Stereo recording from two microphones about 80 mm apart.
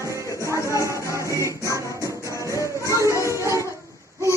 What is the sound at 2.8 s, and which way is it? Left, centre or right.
Music, right.